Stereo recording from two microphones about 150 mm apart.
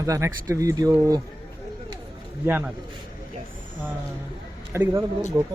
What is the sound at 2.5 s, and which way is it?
Speech, 10° right (ahead or behind).